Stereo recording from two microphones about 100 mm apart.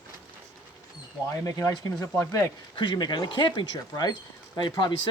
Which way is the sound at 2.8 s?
50° left (ahead or behind).